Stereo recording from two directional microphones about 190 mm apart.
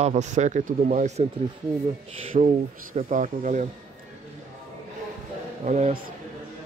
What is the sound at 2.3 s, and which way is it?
Speech, 35° right (ahead or behind).